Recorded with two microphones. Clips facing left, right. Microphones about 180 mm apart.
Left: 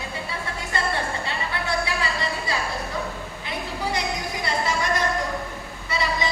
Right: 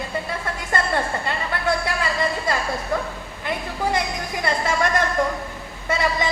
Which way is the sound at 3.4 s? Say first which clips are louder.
Right 5 dB; 50° right (ahead or behind).